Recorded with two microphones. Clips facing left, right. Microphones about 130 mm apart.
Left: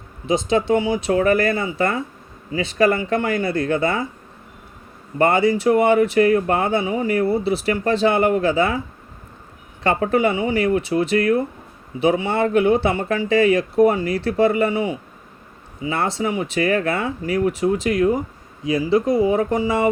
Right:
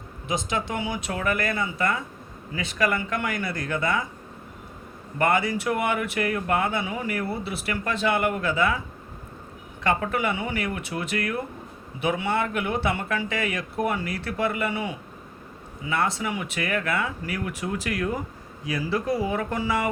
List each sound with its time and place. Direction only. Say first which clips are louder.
0.3 s speech: left 10 dB; 25° left (ahead or behind)
5.1 s speech: left 6 dB; 25° left (ahead or behind)
9.8 s speech: left 7 dB; 30° left (ahead or behind)
15.9 s speech: left 4 dB; 25° left (ahead or behind)